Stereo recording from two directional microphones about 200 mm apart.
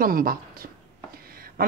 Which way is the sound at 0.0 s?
45° right (ahead or behind).